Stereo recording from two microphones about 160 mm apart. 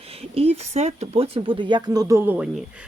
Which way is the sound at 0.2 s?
40° right (ahead or behind).